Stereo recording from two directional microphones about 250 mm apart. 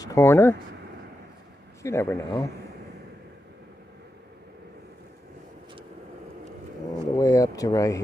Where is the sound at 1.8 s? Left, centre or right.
Centre.